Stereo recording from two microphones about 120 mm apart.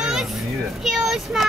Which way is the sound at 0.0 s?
5° right (ahead or behind).